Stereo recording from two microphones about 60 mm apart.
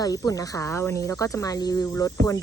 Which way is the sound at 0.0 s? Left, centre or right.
Left.